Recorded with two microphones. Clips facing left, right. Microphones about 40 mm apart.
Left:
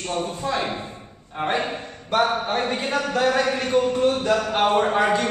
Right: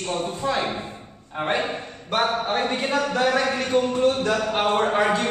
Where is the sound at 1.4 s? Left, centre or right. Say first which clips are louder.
Even; centre.